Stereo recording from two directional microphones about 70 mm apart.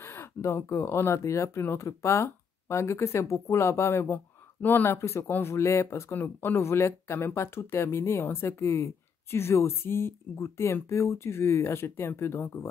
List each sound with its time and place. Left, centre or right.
0.0 s speech: left
4.6 s speech: left
6.1 s speech: left